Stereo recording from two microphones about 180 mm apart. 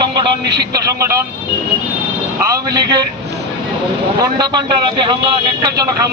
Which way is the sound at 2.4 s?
20° right (ahead or behind).